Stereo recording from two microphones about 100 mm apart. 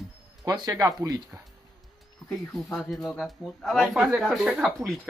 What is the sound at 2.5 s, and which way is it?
Speech, centre (ahead or behind).